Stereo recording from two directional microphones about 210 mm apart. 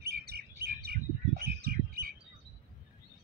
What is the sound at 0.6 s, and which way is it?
Chirp, 45° right (ahead or behind).